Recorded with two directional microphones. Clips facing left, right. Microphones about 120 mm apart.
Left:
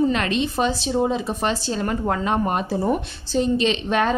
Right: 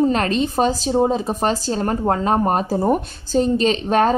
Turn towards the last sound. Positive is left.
turn(degrees=-40)  # may be behind; listen again after turning